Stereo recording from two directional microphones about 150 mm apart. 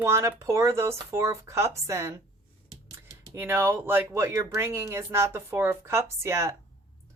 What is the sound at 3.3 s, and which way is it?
Speech, 15° right (ahead or behind).